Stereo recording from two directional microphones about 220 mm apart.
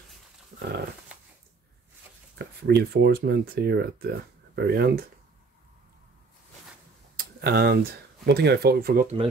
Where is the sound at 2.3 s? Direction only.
45° right (ahead or behind).